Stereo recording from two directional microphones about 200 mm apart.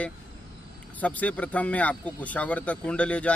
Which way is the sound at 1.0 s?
5° left (ahead or behind).